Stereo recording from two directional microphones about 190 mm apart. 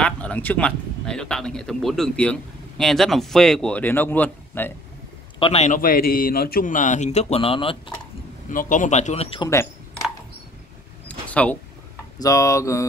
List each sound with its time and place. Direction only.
0.0 s speech: 5° left (ahead or behind)
5.4 s a man's voice: 35° left (ahead or behind)
5.8 s speech: 50° left (ahead or behind); by 7.7 s 30° left (ahead or behind)
8.5 s a man's voice: 45° left (ahead or behind)
11.1 s vehicle: 5° left (ahead or behind)
12.2 s speech: 15° left (ahead or behind)